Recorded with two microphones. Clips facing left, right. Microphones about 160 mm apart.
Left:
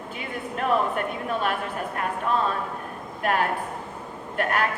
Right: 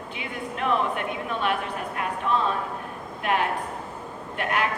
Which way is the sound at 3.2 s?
40° left (ahead or behind).